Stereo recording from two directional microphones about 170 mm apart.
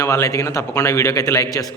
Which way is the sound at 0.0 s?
15° left (ahead or behind).